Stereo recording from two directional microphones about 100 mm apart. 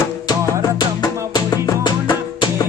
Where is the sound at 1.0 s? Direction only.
40° left (ahead or behind).